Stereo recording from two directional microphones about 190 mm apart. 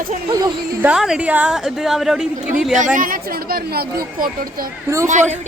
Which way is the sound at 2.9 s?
45° right (ahead or behind).